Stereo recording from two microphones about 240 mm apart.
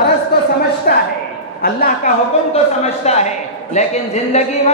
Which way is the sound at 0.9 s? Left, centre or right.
Left.